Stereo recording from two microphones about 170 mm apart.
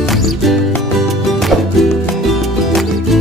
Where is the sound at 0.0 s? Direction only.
Centre (ahead or behind).